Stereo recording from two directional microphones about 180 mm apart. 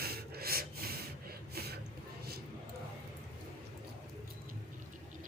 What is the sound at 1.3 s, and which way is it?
Gasp, 60° right (ahead or behind).